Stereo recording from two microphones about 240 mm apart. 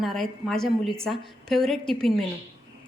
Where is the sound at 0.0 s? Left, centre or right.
Centre.